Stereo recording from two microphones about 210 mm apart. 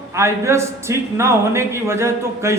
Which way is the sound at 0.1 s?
15° right (ahead or behind).